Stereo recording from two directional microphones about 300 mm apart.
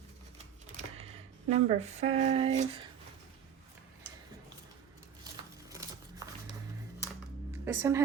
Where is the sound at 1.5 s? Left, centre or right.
Right.